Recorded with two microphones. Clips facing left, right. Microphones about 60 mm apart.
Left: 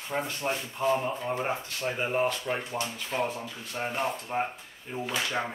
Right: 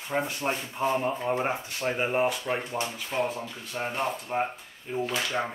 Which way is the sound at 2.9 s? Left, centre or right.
Centre.